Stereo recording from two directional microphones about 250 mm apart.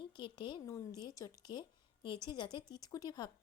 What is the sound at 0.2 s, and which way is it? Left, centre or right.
A woman's voice, centre.